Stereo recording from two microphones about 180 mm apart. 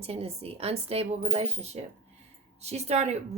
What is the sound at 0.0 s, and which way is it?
A woman's voice, 35° right (ahead or behind).